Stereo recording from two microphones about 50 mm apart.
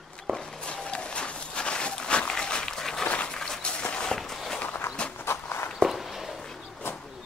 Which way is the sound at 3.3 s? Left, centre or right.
Centre.